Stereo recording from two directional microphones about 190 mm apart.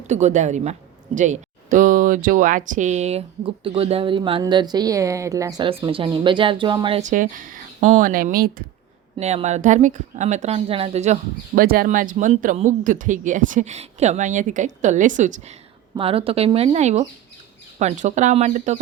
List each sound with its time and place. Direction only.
0.1 s speech: 40° right (ahead or behind)
7.0 s speech: 45° right (ahead or behind)
9.1 s speech: 35° right (ahead or behind)
16.0 s speech: 30° right (ahead or behind)